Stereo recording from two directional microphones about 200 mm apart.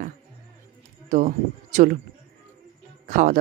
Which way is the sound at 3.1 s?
40° right (ahead or behind).